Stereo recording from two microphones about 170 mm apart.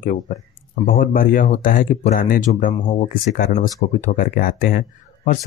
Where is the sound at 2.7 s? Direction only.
40° left (ahead or behind).